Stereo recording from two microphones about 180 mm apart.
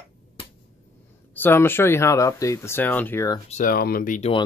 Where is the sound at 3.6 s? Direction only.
55° left (ahead or behind).